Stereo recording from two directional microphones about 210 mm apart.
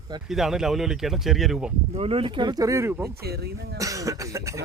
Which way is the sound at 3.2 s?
50° right (ahead or behind).